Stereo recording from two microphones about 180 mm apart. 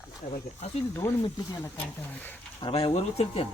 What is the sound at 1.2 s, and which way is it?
Speech, 20° left (ahead or behind).